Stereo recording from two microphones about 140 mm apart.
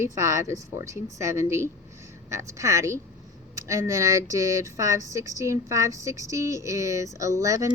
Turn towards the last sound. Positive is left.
turn(degrees=-20)  # may be behind; listen again after turning